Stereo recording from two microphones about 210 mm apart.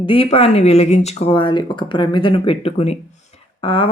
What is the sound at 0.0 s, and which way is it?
Speech, 25° left (ahead or behind).